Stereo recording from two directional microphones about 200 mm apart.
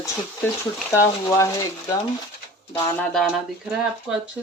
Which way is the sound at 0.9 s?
15° left (ahead or behind).